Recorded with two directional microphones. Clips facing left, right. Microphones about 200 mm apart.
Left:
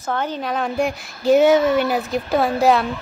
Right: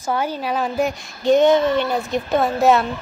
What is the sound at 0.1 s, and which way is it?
A woman's voice, 10° right (ahead or behind).